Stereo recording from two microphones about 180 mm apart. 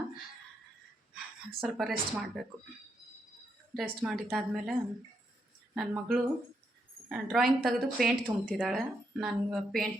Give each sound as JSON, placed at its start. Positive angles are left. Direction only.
{"t": 1.1, "sound": "a sound", "side_deg": 0}
{"t": 2.1, "sound": "speech", "side_deg": 0}
{"t": 3.8, "sound": "speech", "side_deg": -5}